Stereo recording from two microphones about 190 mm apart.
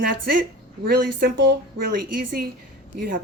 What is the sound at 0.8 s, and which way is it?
A woman's voice, 50° right (ahead or behind).